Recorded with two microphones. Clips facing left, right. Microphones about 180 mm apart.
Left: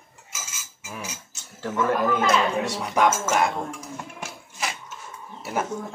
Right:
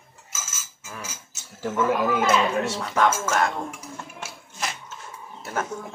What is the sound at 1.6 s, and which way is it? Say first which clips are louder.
Speech: even; 5° right (ahead or behind).